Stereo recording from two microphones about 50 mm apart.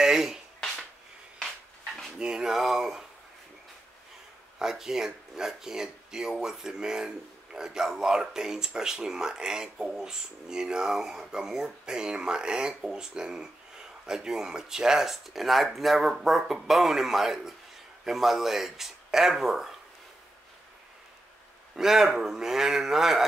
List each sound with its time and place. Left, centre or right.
0.0 s a sound: centre
2.1 s speech: centre
4.6 s speech: centre
21.7 s speech: centre